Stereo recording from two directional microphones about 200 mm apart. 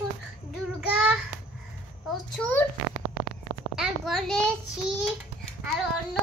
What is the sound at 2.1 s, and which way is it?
Speech, 10° left (ahead or behind).